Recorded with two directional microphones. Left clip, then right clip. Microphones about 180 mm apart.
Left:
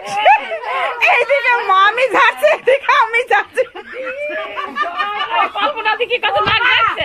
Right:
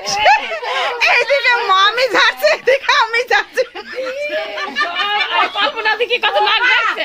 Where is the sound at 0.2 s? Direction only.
20° right (ahead or behind).